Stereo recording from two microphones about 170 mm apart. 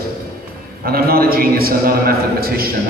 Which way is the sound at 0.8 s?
65° right (ahead or behind).